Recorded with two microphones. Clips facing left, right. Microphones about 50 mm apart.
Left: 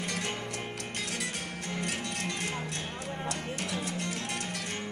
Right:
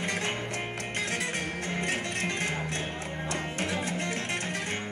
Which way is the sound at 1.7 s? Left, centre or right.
Right.